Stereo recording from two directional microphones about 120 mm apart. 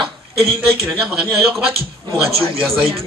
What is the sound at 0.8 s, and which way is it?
Speech, 5° right (ahead or behind).